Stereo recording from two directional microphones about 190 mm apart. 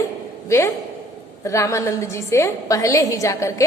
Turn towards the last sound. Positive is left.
turn(degrees=15)  # may be behind; listen again after turning